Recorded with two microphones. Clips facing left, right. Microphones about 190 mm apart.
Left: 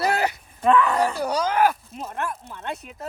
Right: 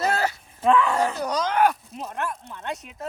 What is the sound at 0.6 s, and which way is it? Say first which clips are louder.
Speech: left 1 dB; centre (ahead or behind).